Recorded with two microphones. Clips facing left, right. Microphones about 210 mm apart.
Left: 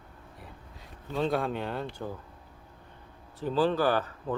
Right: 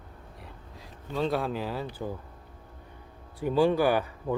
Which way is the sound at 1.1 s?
Centre (ahead or behind).